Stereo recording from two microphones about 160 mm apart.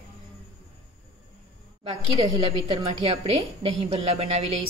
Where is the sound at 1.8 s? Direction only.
35° right (ahead or behind).